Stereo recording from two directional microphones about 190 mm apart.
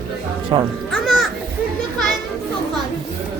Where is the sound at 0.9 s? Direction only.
Centre (ahead or behind).